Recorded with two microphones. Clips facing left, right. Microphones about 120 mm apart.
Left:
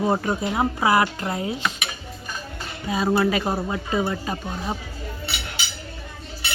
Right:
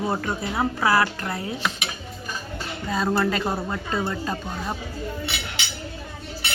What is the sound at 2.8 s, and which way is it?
A woman's voice, 10° left (ahead or behind).